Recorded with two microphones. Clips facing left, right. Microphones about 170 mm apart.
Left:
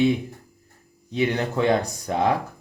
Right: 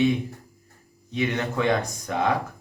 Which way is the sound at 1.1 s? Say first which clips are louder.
Left 2 dB; 35° left (ahead or behind).